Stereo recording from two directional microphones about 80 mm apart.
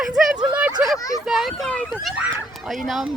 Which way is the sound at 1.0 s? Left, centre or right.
Left.